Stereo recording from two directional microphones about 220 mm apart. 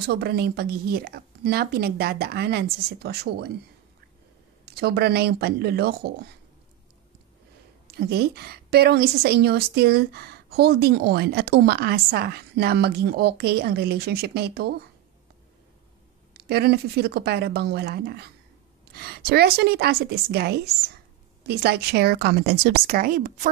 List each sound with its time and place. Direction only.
0.0 s a woman's voice: 45° right (ahead or behind)
4.6 s a woman's voice: 45° right (ahead or behind)
7.9 s a woman's voice: 45° right (ahead or behind)
16.4 s a woman's voice: 45° right (ahead or behind)